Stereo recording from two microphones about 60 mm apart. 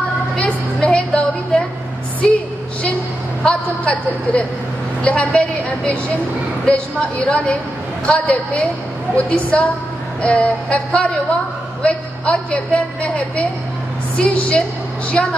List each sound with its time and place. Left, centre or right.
0.8 s music: centre
3.4 s a woman's voice: centre